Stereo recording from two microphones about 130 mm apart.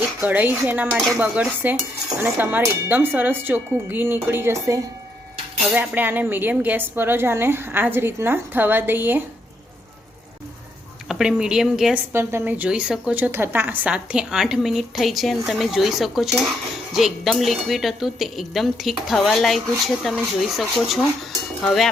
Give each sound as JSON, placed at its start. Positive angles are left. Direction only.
{"t": 0.2, "sound": "speech", "side_deg": -15}
{"t": 5.7, "sound": "speech", "side_deg": -15}
{"t": 11.1, "sound": "a woman's voice", "side_deg": -5}
{"t": 12.1, "sound": "a woman's voice", "side_deg": -20}